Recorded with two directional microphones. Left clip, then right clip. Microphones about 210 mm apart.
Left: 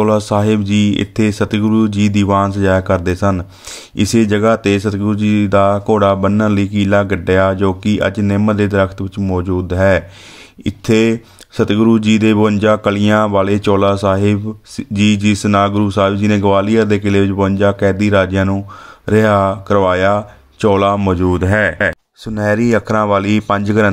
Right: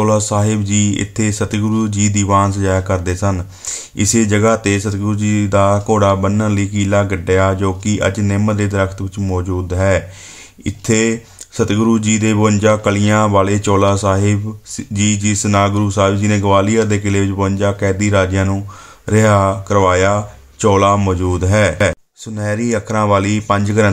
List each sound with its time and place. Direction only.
0.0 s speech: 25° left (ahead or behind)
22.3 s speech: 30° left (ahead or behind)